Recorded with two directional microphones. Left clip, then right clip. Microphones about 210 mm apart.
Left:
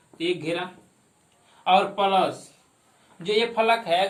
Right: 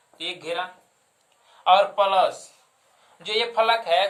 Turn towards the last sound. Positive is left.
turn(degrees=-25)  # may be behind; listen again after turning